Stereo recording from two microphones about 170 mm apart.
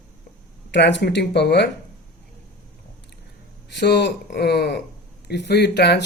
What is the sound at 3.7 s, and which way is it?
Speech, 90° left.